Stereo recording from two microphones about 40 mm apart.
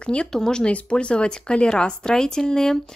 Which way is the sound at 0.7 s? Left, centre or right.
Left.